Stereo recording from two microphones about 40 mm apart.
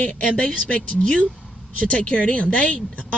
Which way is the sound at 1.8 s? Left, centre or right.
Left.